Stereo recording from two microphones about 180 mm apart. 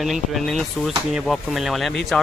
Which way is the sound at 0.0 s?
Centre (ahead or behind).